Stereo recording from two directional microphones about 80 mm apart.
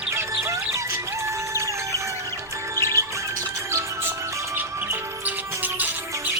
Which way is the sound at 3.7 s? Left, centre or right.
Right.